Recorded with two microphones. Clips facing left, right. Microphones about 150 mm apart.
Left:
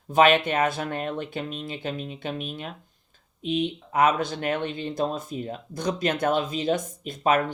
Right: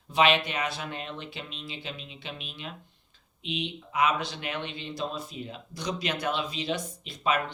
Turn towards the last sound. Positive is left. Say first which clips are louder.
# left 6 dB
turn(degrees=50)  # may be behind; listen again after turning